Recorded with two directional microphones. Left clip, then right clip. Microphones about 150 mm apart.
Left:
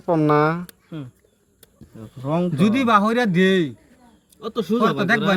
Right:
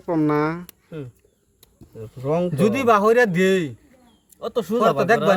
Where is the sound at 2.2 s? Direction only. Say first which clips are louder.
Right 2 dB; 45° right (ahead or behind).